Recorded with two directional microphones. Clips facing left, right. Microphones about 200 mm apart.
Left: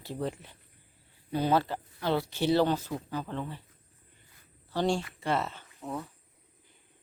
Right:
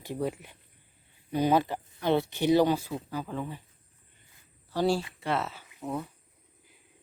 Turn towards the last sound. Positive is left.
turn(degrees=-10)  # may be behind; listen again after turning